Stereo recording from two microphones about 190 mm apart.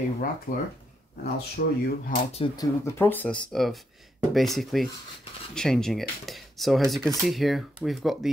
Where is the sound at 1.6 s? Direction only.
50° left (ahead or behind).